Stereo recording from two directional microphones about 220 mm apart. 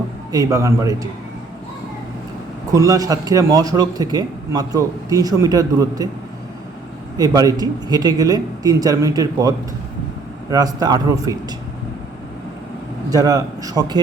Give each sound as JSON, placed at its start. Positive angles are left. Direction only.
{"t": 0.3, "sound": "a man's voice", "side_deg": -15}
{"t": 2.7, "sound": "a man's voice", "side_deg": -15}
{"t": 7.2, "sound": "a man's voice", "side_deg": -15}
{"t": 13.1, "sound": "a man's voice", "side_deg": -15}